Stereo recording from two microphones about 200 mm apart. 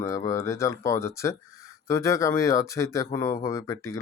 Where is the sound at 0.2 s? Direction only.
15° left (ahead or behind).